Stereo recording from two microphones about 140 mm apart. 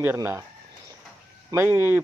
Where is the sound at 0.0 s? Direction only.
15° right (ahead or behind).